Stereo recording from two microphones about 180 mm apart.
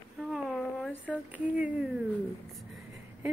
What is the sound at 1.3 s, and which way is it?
Speech, 5° right (ahead or behind).